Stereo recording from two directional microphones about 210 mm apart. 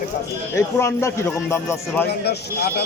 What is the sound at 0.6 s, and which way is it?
Speech, 10° left (ahead or behind).